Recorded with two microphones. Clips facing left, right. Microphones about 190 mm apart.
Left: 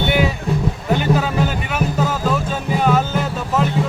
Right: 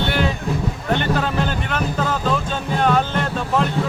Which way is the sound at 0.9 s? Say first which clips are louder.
Left 2 dB; 5° left (ahead or behind).